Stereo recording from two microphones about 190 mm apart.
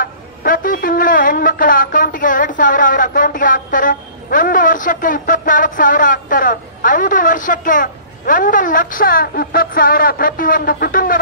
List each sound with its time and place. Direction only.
0.0 s a man's voice: 45° left (ahead or behind)